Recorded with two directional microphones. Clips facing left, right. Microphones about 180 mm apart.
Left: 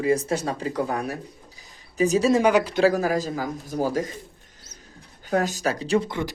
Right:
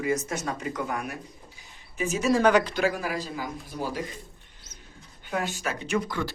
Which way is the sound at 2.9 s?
40° left (ahead or behind).